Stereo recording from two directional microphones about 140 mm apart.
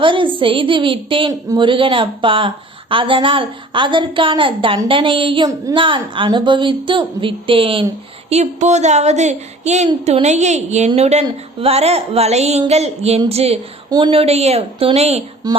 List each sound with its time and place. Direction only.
0.0 s a sound: 35° right (ahead or behind)
0.3 s a woman's voice: 40° right (ahead or behind)
8.3 s speech: 55° right (ahead or behind)
15.4 s speech: 30° right (ahead or behind)